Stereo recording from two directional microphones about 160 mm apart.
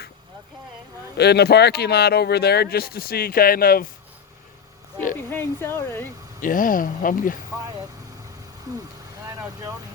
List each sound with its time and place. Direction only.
1.1 s speech: 90° left; by 3.8 s 65° left (ahead or behind)
5.3 s speech: 15° left (ahead or behind)
6.4 s speech: 60° left (ahead or behind)
9.2 s vehicle: 20° right (ahead or behind)